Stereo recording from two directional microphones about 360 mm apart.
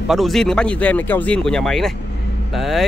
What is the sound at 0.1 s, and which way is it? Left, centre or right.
Speech, centre.